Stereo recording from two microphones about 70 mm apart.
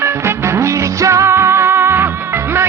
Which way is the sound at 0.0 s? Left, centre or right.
Right.